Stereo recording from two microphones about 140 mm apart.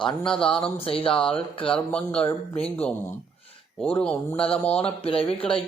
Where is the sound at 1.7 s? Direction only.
10° left (ahead or behind).